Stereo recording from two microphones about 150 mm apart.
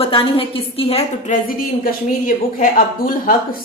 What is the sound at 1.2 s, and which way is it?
A woman's voice, 70° left (ahead or behind).